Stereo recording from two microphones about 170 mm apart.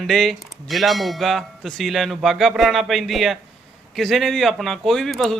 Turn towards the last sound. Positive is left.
turn(degrees=0)  # may be behind; listen again after turning